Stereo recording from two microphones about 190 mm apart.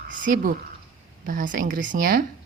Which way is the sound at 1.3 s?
45° right (ahead or behind).